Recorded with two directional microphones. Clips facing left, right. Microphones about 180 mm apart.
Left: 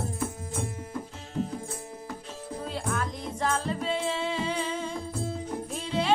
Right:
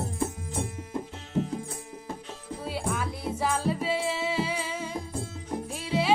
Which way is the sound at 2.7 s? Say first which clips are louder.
Right 1 dB; 10° right (ahead or behind).